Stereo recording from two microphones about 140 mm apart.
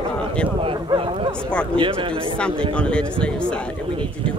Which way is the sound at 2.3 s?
5° left (ahead or behind).